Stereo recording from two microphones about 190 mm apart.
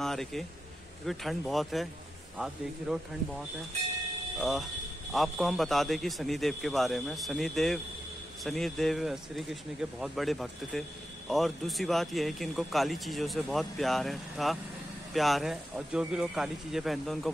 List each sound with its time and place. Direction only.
0.0 s speech: centre (ahead or behind)